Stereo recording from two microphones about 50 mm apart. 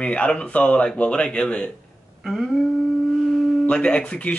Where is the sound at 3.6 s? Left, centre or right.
Left.